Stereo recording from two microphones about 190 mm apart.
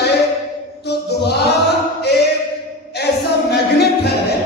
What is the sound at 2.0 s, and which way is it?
Choir, 60° left (ahead or behind).